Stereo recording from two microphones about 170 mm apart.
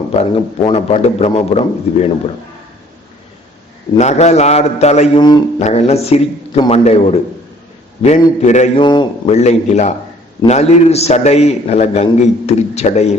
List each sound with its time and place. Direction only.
0.1 s a man's voice: 35° left (ahead or behind)
3.9 s a man's voice: 40° left (ahead or behind)
8.8 s a man's voice: 25° left (ahead or behind)
9.3 s a man's voice: 40° left (ahead or behind)